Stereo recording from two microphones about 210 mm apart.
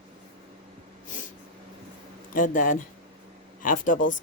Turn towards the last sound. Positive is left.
turn(degrees=40)  # may be behind; listen again after turning